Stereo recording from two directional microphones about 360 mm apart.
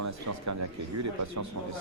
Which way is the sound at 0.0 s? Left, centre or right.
Right.